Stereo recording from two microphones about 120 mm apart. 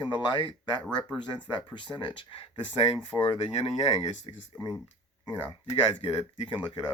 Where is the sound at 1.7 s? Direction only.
45° left (ahead or behind); by 4.0 s 60° left (ahead or behind).